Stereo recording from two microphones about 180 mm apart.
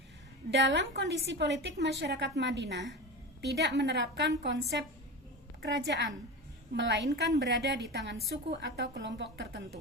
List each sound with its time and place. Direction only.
0.5 s a woman's voice: 75° right (ahead or behind)